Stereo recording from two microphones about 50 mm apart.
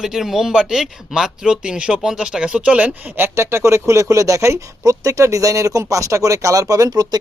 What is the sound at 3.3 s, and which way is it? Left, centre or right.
Speech, right.